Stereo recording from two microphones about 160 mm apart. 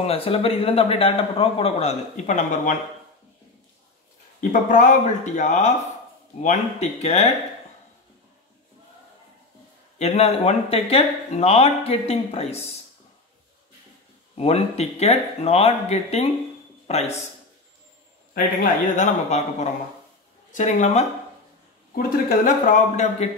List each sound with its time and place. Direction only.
0.0 s a man's voice: 35° left (ahead or behind)
4.4 s speech: 55° left (ahead or behind)
9.9 s a man's voice: 40° left (ahead or behind)
14.3 s a man's voice: 40° left (ahead or behind)
18.3 s a man's voice: 60° left (ahead or behind)
19.2 s speech: 45° left (ahead or behind)